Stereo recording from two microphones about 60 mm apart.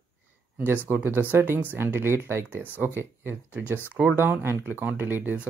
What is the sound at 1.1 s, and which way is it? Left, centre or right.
Speech, right.